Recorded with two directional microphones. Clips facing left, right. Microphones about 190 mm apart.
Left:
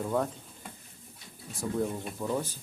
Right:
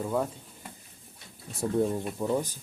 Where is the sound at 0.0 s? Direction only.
5° right (ahead or behind).